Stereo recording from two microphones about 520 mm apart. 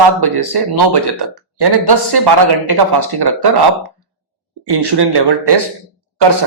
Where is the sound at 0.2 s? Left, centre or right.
Right.